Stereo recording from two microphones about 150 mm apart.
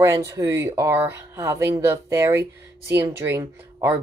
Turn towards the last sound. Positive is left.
turn(degrees=-15)  # may be behind; listen again after turning